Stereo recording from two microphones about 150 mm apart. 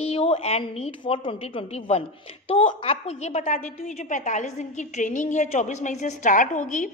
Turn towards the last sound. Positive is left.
turn(degrees=60)  # may be behind; listen again after turning